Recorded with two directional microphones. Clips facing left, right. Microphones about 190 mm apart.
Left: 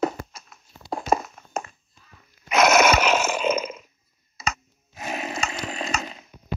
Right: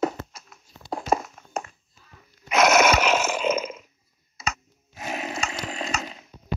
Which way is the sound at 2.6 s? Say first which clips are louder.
Left 1 dB; 45° left (ahead or behind).